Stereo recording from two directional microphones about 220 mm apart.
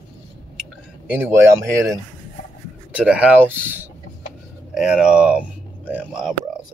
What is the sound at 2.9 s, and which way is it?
Speech, 5° right (ahead or behind).